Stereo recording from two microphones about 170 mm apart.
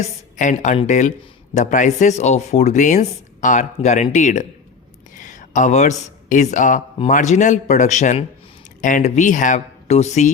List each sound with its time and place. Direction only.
0.0 s speech: 45° left (ahead or behind)